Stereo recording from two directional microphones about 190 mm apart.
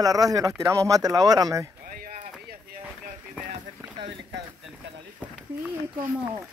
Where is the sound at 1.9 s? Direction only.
40° right (ahead or behind).